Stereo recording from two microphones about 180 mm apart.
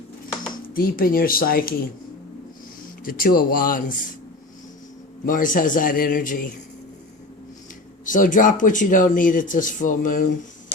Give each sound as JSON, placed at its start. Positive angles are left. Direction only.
{"t": 0.7, "sound": "speech", "side_deg": 55}
{"t": 3.0, "sound": "speech", "side_deg": 50}
{"t": 5.2, "sound": "speech", "side_deg": 50}
{"t": 8.0, "sound": "speech", "side_deg": 45}